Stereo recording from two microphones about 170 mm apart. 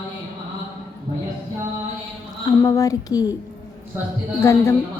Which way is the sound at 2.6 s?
20° left (ahead or behind).